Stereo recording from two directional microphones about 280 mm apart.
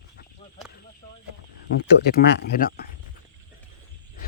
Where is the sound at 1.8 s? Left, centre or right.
Left.